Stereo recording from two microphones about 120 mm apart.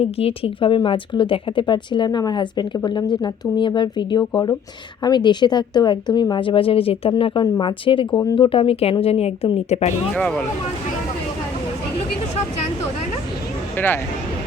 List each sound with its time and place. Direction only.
0.0 s speech: 55° left (ahead or behind)
8.2 s speech: 30° left (ahead or behind)
8.4 s speech: 50° left (ahead or behind)
10.2 s speech: 10° left (ahead or behind)
13.7 s speech: 15° left (ahead or behind)